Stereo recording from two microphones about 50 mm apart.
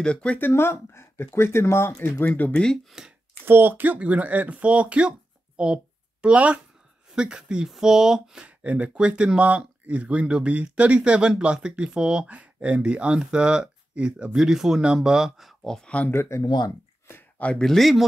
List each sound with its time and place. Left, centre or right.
0.0 s speech: left
0.4 s speech: left
2.0 s speech: left
2.5 s speech: centre
3.4 s speech: right; by 8.5 s centre
8.5 s speech: right
12.3 s speech: right
14.3 s speech: centre
15.6 s speech: centre
16.1 s speech: left
17.6 s speech: centre